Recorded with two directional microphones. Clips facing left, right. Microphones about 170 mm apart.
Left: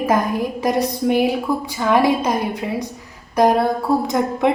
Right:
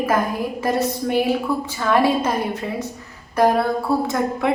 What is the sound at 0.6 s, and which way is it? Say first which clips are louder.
A woman's voice: left 2 dB; 15° left (ahead or behind).